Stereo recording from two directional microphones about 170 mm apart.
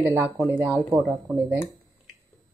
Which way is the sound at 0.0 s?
10° right (ahead or behind).